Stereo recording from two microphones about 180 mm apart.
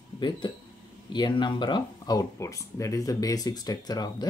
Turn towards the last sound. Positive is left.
turn(degrees=20)  # may be behind; listen again after turning